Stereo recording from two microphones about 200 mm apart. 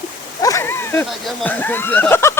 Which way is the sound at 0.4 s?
15° left (ahead or behind).